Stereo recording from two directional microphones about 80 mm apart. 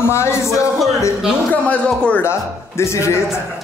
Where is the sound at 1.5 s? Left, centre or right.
Centre.